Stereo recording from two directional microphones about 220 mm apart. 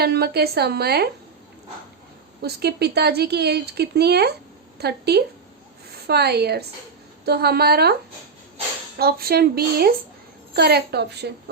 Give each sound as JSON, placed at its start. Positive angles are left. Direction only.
{"t": 0.0, "sound": "speech", "side_deg": -45}
{"t": 2.4, "sound": "speech", "side_deg": -45}
{"t": 9.0, "sound": "speech", "side_deg": -45}